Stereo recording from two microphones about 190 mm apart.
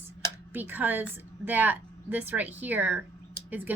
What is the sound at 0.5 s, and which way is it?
A woman's voice, 10° right (ahead or behind).